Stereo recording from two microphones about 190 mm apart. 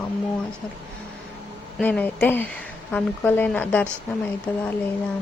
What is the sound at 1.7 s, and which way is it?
Speech, 5° left (ahead or behind).